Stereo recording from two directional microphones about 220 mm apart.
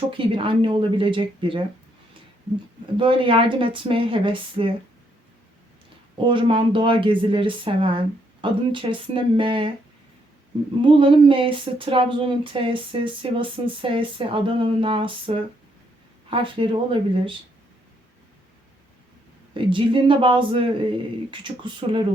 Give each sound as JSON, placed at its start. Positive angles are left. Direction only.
{"t": 0.1, "sound": "speech", "side_deg": -25}
{"t": 3.0, "sound": "speech", "side_deg": -25}
{"t": 6.1, "sound": "speech", "side_deg": -20}
{"t": 10.8, "sound": "speech", "side_deg": -25}
{"t": 19.5, "sound": "speech", "side_deg": -25}